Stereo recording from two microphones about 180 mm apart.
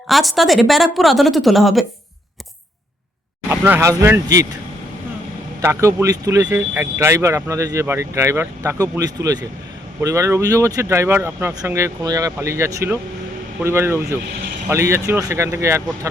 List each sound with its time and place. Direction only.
0.1 s a woman's voice: centre (ahead or behind)
3.5 s speech: 15° right (ahead or behind)
5.6 s speech: 15° right (ahead or behind)